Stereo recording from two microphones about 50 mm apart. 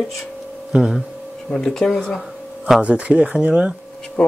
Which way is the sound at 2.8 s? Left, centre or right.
Right.